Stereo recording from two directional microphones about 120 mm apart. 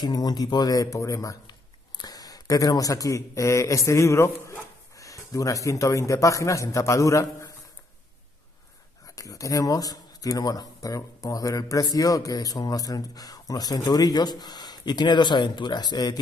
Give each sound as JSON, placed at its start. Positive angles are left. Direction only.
{"t": 0.0, "sound": "speech", "side_deg": 35}
{"t": 9.0, "sound": "speech", "side_deg": 30}